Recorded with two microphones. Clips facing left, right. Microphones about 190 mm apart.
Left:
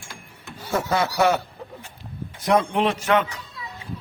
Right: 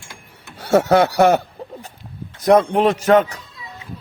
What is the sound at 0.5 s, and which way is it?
Speech, 85° right.